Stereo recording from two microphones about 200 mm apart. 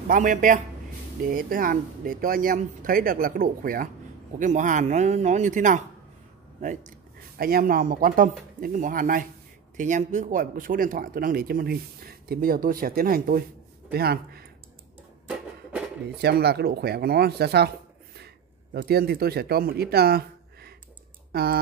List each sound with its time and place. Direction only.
0.1 s speech: 40° right (ahead or behind)
16.2 s speech: 55° right (ahead or behind)